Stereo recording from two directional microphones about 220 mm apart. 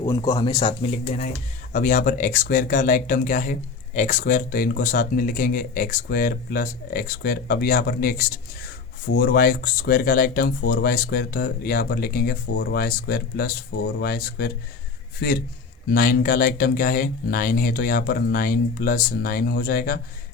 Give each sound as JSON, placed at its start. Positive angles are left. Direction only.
{"t": 0.0, "sound": "speech", "side_deg": 15}